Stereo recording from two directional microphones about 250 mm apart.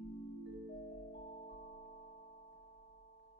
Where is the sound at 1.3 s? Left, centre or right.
Left.